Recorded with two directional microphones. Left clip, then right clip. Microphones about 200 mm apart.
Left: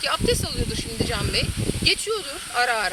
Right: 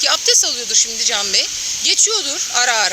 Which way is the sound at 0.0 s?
40° right (ahead or behind).